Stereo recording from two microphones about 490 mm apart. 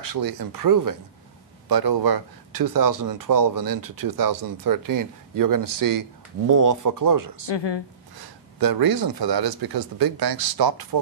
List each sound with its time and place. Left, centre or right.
0.0 s speech: right
7.4 s speech: left
8.2 s a man's voice: right